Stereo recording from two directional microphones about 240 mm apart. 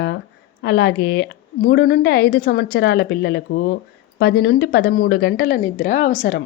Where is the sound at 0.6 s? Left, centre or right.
Left.